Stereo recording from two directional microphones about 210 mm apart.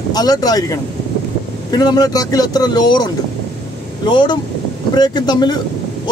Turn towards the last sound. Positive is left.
turn(degrees=20)  # may be behind; listen again after turning